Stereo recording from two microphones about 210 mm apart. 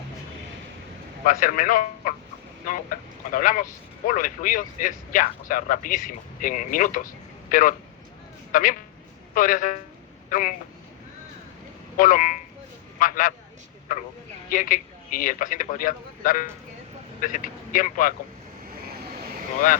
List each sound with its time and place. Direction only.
1.2 s a man's voice: 40° left (ahead or behind)
11.9 s a man's voice: 40° left (ahead or behind)